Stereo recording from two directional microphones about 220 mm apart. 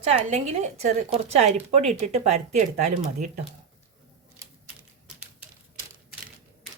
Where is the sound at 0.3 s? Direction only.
30° right (ahead or behind).